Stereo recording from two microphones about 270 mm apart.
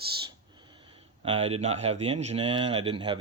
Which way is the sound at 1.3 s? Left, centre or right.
Right.